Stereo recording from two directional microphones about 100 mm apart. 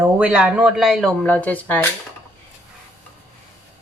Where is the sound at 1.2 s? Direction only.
15° left (ahead or behind).